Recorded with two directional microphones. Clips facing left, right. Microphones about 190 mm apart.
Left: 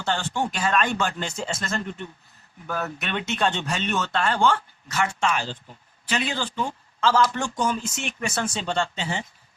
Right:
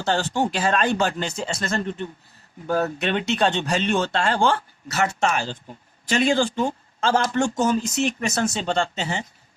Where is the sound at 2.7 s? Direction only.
35° right (ahead or behind).